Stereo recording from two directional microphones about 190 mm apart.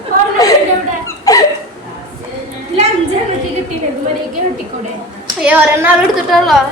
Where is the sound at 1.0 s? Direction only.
20° left (ahead or behind).